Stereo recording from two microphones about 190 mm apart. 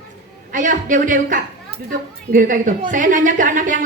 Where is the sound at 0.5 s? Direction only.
40° right (ahead or behind).